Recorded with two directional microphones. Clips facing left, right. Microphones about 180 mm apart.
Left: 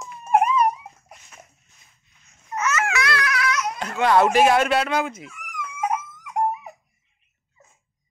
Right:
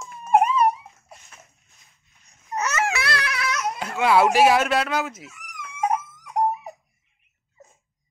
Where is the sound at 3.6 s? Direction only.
10° right (ahead or behind).